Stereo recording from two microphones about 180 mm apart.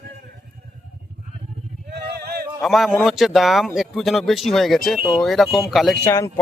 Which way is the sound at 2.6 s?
Centre (ahead or behind).